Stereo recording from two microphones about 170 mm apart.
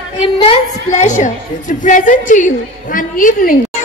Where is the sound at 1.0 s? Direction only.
45° left (ahead or behind).